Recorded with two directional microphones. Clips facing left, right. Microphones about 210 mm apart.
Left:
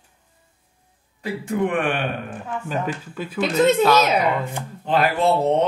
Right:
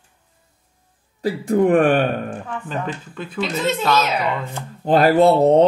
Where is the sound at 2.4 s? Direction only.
10° left (ahead or behind).